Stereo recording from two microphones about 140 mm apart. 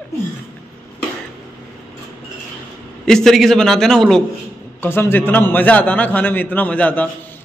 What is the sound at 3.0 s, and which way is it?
A man's voice, 5° left (ahead or behind).